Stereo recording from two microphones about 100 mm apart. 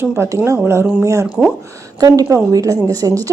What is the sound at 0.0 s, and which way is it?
A woman's voice, 25° right (ahead or behind).